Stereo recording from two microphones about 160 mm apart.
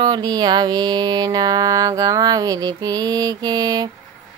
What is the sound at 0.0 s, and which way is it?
Mantra, 25° right (ahead or behind).